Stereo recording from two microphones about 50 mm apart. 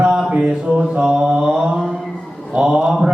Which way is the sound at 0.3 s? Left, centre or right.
Right.